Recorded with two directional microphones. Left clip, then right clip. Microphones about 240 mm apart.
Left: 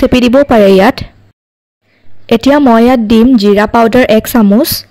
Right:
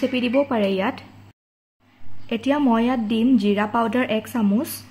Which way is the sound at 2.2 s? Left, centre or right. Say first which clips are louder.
Left 15 dB; left.